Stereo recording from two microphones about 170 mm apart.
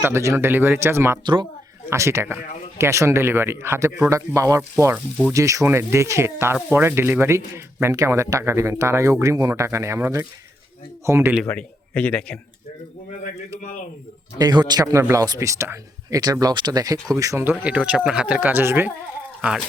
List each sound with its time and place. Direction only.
0.0 s speech: 15° right (ahead or behind)
1.2 s speech: 30° right (ahead or behind)
1.9 s speech: 15° right (ahead or behind)
11.4 s speech: 10° left (ahead or behind)
14.3 s speech: 25° right (ahead or behind)
17.5 s speech: 5° right (ahead or behind)
19.4 s a sound: 5° right (ahead or behind)